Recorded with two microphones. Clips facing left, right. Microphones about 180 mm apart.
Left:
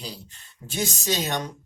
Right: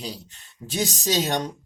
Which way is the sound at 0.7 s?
35° right (ahead or behind).